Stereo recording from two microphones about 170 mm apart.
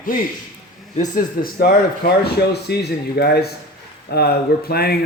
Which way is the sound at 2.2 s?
70° left (ahead or behind).